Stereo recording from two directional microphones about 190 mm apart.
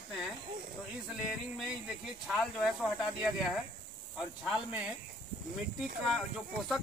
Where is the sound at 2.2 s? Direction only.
Centre (ahead or behind).